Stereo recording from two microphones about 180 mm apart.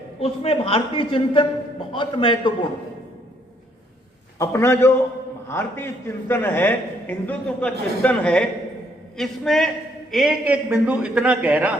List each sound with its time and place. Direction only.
0.2 s a woman's voice: 30° left (ahead or behind)
4.4 s a man's voice: 15° left (ahead or behind); by 11.7 s 10° right (ahead or behind)